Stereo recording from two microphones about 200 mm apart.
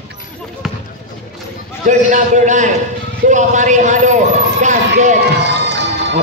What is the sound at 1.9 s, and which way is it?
A man's voice, 40° right (ahead or behind).